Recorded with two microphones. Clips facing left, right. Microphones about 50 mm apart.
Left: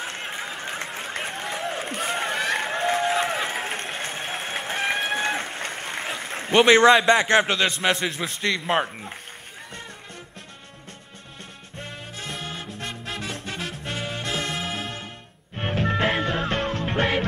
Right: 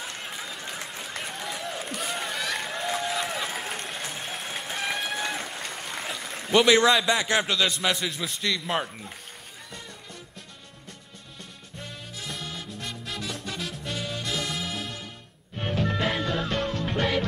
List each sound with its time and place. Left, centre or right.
0.0 s applause: left
5.1 s a man's voice: left
11.8 s music: left